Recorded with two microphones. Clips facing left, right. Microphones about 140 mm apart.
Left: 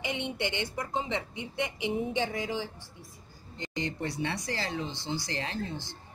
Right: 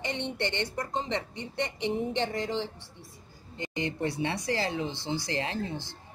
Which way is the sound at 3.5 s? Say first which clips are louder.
Right 2 dB; 15° right (ahead or behind).